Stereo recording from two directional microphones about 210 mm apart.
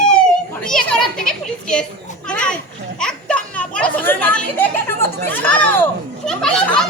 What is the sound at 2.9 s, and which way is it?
Children playing, 5° left (ahead or behind).